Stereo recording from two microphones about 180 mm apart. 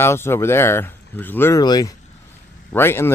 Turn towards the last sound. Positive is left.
turn(degrees=15)  # may be behind; listen again after turning